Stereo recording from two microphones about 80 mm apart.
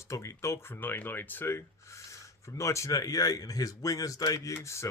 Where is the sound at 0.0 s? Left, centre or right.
Left.